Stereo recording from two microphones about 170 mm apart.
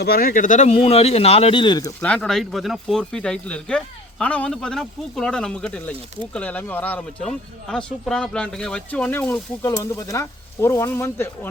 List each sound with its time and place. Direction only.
0.0 s speech: 65° left (ahead or behind); by 1.9 s 25° left (ahead or behind)
2.0 s speech: 10° left (ahead or behind)